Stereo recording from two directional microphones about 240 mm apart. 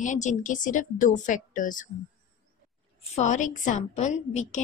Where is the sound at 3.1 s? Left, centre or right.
Left.